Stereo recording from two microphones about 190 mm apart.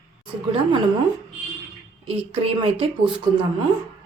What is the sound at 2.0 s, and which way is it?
Speech, 30° right (ahead or behind).